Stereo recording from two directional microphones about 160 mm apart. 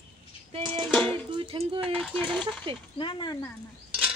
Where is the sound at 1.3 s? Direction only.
30° right (ahead or behind).